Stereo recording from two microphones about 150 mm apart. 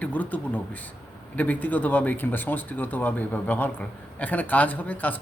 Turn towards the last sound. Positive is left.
turn(degrees=10)  # may be behind; listen again after turning